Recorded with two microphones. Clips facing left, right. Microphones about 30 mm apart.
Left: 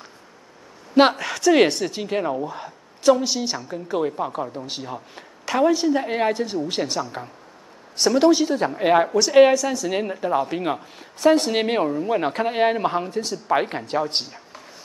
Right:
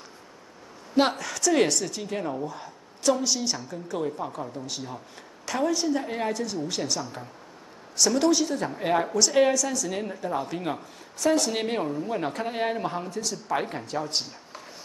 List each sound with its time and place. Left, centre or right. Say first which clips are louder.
0.9 s speech: left 7 dB; left
2.3 s a woman's voice: left 5 dB; left
6.0 s speech: left 7 dB; left
8.0 s a woman's voice: left 5 dB; left